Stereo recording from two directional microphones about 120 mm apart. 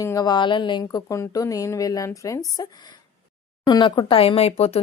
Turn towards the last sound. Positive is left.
turn(degrees=60)  # may be behind; listen again after turning